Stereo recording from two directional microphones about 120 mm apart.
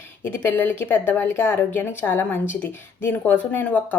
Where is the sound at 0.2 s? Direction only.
20° left (ahead or behind).